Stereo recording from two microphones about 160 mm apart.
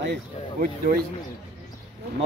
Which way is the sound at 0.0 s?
80° right.